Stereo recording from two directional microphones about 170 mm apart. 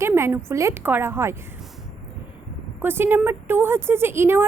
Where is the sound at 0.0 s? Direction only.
15° right (ahead or behind).